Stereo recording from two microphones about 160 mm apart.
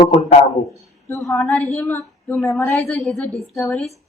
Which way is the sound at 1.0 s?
10° left (ahead or behind).